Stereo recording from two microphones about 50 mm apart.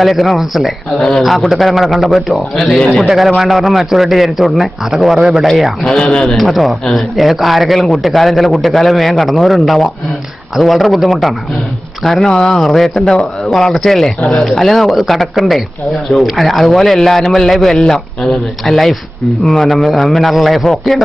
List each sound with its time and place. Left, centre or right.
0.0 s a man's voice: centre
0.9 s speech: centre
1.2 s a man's voice: centre
2.8 s speech: centre
3.3 s a man's voice: centre
5.9 s speech: centre
6.3 s a man's voice: centre
12.3 s speech: centre
12.5 s a man's voice: centre